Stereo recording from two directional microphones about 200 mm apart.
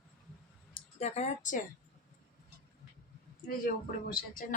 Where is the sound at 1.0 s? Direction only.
35° left (ahead or behind).